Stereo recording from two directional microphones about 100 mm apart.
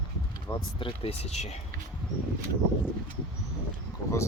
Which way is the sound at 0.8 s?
70° left (ahead or behind).